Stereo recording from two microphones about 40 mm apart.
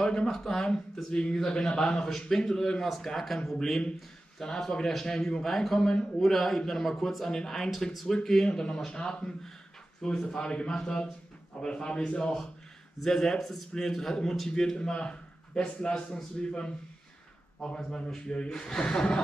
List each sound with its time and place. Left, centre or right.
0.0 s a sound: centre
0.3 s speech: centre
5.8 s speech: centre
6.3 s speech: centre
8.5 s a man's voice: centre
13.0 s a man's voice: centre